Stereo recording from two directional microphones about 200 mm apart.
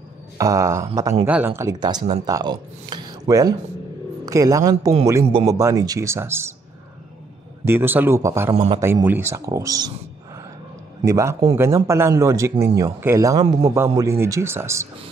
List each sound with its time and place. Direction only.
0.4 s speech: 15° right (ahead or behind)
7.6 s speech: 10° right (ahead or behind)
8.5 s speech: 25° right (ahead or behind)
8.8 s speech: 10° right (ahead or behind)
11.1 s speech: 15° right (ahead or behind)